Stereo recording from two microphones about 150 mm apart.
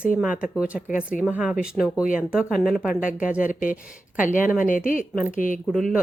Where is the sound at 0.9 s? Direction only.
60° left (ahead or behind).